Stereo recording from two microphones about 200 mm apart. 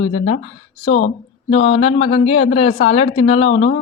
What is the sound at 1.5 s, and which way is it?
Speech, 30° left (ahead or behind).